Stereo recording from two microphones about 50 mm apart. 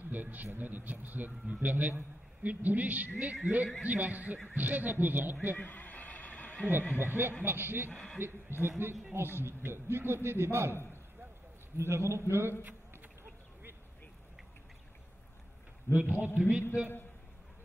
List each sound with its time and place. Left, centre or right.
0.1 s a man's voice: right
5.6 s a sound: left
7.0 s speech: right
10.7 s a man's voice: left
11.7 s a man's voice: right
15.9 s a man's voice: right